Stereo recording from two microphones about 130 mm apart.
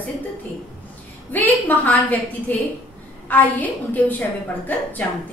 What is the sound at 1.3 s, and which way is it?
A woman's voice, 15° left (ahead or behind).